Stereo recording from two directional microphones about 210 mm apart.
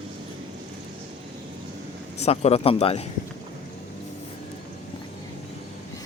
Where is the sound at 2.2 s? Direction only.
30° left (ahead or behind).